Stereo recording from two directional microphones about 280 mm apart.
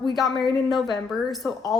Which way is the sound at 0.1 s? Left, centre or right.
Centre.